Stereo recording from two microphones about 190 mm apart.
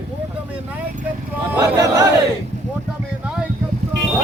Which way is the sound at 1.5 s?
15° right (ahead or behind).